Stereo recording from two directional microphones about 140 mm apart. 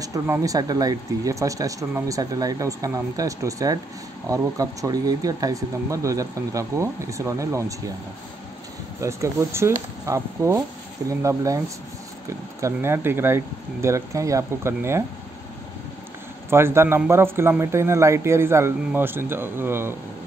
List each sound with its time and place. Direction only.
0.0 s speech: 25° right (ahead or behind)
9.0 s speech: 20° right (ahead or behind)
16.4 s speech: 20° right (ahead or behind)